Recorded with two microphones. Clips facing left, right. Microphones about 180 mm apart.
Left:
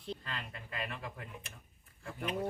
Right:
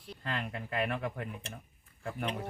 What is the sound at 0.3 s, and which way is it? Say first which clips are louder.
Speech: right 7 dB; 65° right (ahead or behind).